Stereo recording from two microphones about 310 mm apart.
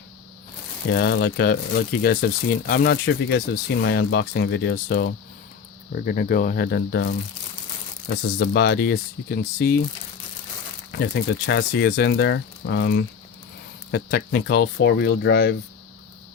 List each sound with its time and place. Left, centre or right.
0.9 s speech: left
8.4 s speech: left
10.9 s speech: left